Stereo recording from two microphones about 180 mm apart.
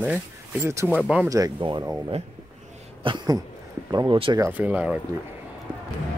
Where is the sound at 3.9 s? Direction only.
25° right (ahead or behind).